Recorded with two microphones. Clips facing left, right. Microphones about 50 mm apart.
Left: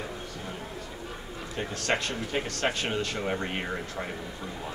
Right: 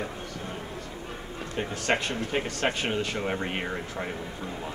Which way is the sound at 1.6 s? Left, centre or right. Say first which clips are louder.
Right 2 dB; centre.